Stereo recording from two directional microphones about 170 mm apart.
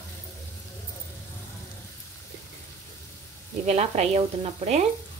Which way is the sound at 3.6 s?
40° right (ahead or behind).